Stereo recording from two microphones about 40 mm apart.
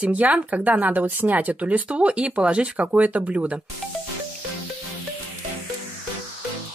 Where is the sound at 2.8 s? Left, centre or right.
Right.